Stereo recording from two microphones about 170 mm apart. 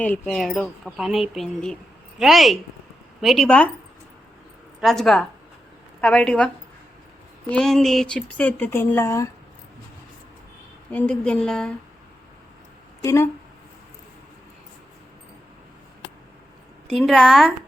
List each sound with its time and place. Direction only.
0.0 s speech: 5° left (ahead or behind)
4.8 s speech: centre (ahead or behind)
7.5 s speech: 5° left (ahead or behind)
10.9 s speech: 10° left (ahead or behind)
13.0 s speech: 15° left (ahead or behind)
16.9 s speech: centre (ahead or behind)